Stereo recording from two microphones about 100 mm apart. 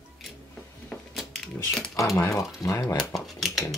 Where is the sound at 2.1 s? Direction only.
30° left (ahead or behind).